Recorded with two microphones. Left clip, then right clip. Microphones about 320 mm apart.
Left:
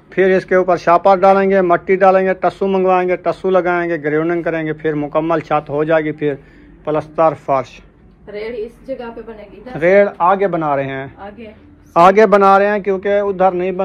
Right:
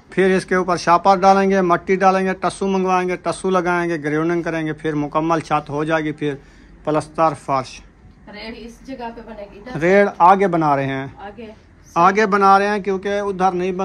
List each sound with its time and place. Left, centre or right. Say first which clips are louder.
0.1 s speech: left 4 dB; centre
9.8 s speech: left 3 dB; centre